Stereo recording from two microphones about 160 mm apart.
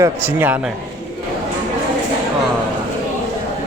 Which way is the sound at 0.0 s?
15° right (ahead or behind).